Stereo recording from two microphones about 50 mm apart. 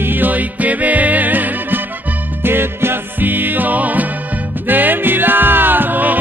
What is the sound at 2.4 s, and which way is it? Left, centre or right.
Music, right.